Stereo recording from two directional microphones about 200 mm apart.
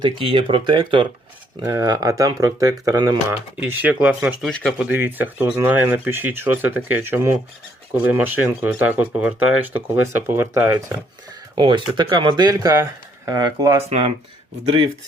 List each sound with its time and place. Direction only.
0.0 s speech: 25° right (ahead or behind); by 4.4 s 5° right (ahead or behind)
4.4 s speech: 5° left (ahead or behind)
4.9 s speech: 10° right (ahead or behind)